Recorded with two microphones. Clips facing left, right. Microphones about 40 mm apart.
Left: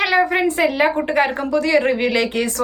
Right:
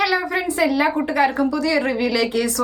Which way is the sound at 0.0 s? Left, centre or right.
Left.